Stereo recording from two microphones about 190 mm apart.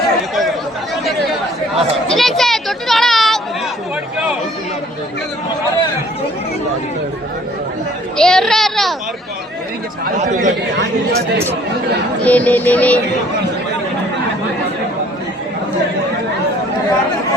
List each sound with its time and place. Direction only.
2.0 s children playing: centre (ahead or behind)
8.2 s speech: centre (ahead or behind)
10.2 s speech: 40° right (ahead or behind)
12.2 s music: 10° left (ahead or behind)